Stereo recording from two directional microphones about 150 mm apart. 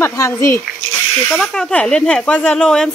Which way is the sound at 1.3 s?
5° left (ahead or behind).